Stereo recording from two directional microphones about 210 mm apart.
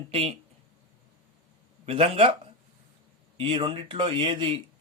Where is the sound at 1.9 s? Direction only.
25° right (ahead or behind).